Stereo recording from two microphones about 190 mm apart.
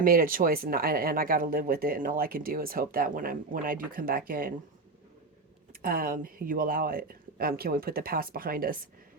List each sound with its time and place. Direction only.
0.0 s speech: 50° right (ahead or behind)
5.8 s speech: 50° right (ahead or behind)